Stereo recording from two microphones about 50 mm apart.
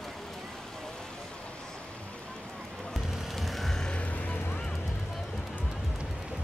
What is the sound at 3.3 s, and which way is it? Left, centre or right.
Music, centre.